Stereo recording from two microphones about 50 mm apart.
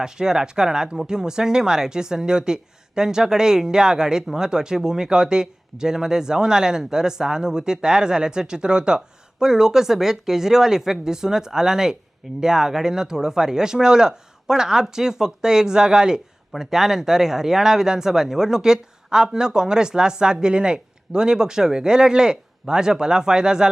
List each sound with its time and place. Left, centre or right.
0.0 s speech: centre